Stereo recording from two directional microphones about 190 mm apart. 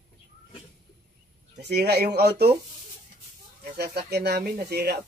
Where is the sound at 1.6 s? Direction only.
60° right (ahead or behind).